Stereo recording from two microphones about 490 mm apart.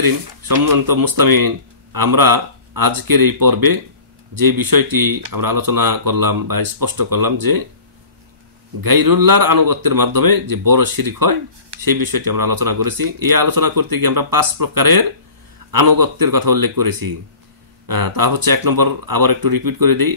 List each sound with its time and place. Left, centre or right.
0.0 s a man's voice: right
8.8 s a man's voice: right